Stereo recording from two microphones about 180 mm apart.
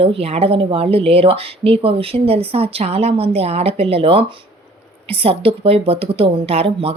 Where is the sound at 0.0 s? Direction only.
30° right (ahead or behind).